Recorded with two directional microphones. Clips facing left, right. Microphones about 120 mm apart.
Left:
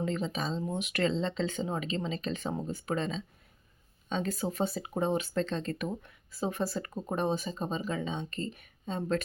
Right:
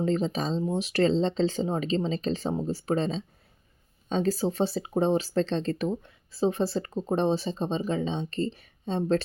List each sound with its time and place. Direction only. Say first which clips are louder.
0.0 s speech: right 6 dB; 35° right (ahead or behind)